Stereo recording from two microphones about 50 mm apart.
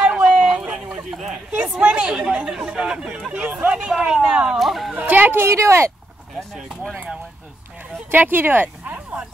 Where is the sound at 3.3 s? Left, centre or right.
Right.